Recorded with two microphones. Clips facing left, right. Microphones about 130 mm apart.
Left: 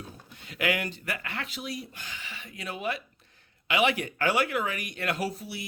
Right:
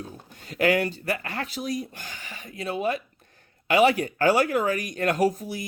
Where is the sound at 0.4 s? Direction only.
40° right (ahead or behind).